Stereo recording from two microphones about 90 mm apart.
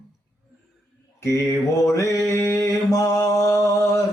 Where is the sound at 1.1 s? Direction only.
35° left (ahead or behind).